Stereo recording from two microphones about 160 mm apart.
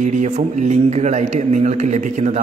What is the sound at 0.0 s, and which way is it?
A man's voice, 50° right (ahead or behind).